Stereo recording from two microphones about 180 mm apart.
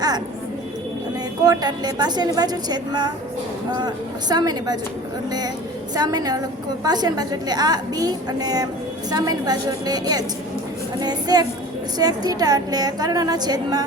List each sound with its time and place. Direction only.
1.5 s a woman's voice: 20° right (ahead or behind)
5.9 s a woman's voice: 20° right (ahead or behind)